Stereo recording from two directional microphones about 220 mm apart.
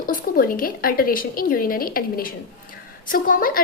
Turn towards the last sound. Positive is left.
turn(degrees=40)  # may be behind; listen again after turning